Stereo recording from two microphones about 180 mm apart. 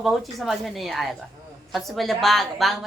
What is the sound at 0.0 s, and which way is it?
A woman's voice, centre (ahead or behind).